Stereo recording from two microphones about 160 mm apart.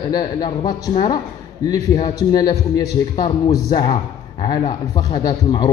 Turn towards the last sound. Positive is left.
turn(degrees=25)  # may be behind; listen again after turning